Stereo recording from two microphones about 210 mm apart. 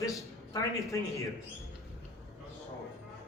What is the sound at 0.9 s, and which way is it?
Speech, 15° left (ahead or behind).